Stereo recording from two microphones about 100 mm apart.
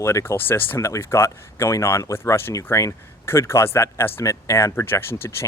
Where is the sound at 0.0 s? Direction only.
30° left (ahead or behind).